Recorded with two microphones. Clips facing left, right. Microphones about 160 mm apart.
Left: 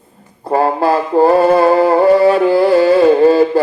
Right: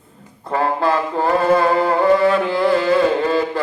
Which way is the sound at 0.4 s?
35° left (ahead or behind).